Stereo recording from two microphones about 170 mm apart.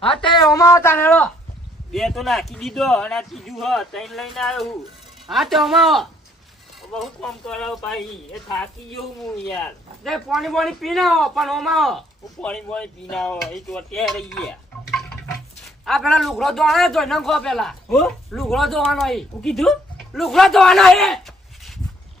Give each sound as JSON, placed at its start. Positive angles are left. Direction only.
{"t": 0.0, "sound": "a woman's voice", "side_deg": 30}
{"t": 0.4, "sound": "a man's voice", "side_deg": 20}
{"t": 10.0, "sound": "a man's voice", "side_deg": 0}
{"t": 15.8, "sound": "a man's voice", "side_deg": 0}